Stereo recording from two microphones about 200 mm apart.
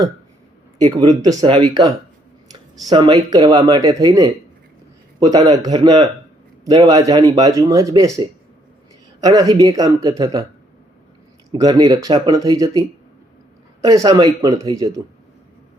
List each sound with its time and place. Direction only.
0.8 s speech: 20° right (ahead or behind)
9.2 s speech: 15° right (ahead or behind)
11.5 s speech: 20° right (ahead or behind)